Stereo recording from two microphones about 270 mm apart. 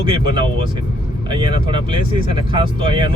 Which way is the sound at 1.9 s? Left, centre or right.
Centre.